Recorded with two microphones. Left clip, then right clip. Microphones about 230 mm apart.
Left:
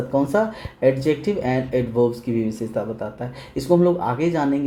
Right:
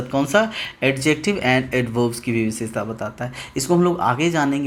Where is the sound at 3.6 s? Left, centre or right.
Right.